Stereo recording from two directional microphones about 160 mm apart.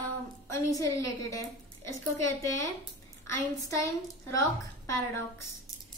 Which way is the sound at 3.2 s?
20° left (ahead or behind).